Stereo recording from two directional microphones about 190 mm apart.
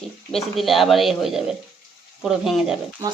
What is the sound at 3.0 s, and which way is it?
Speech, 10° right (ahead or behind).